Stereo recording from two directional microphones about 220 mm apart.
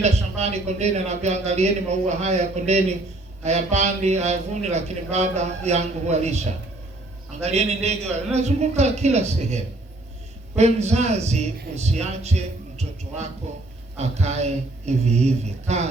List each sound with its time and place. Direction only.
0.0 s a man's voice: 30° right (ahead or behind)